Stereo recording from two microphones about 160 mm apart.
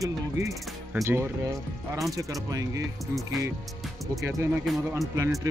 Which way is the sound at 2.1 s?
20° right (ahead or behind).